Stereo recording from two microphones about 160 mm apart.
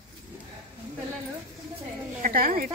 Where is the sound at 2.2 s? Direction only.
65° right (ahead or behind).